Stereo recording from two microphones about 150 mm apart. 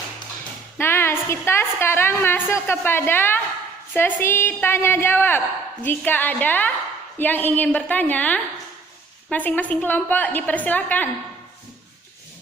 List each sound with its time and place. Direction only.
0.8 s a woman's voice: 15° left (ahead or behind)